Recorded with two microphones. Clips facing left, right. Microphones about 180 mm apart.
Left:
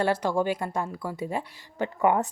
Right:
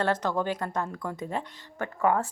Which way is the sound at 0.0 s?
10° left (ahead or behind).